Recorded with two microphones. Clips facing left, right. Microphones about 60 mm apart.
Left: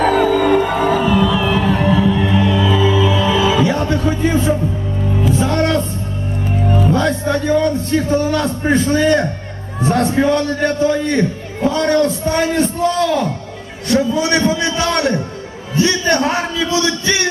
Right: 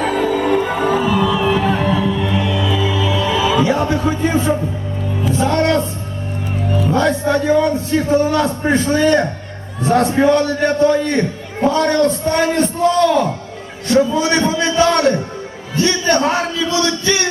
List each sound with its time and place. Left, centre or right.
0.0 s music: left
0.4 s music: centre
1.3 s music: centre
1.8 s music: centre
2.5 s music: left
2.9 s music: centre
3.5 s speech: centre
5.3 s music: centre
6.8 s a man's voice: centre